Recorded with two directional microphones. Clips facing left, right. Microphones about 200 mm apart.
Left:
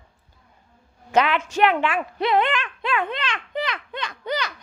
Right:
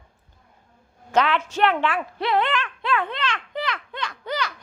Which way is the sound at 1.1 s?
15° left (ahead or behind).